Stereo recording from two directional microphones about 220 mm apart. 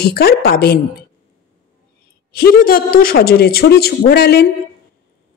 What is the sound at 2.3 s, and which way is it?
A woman's voice, 40° left (ahead or behind).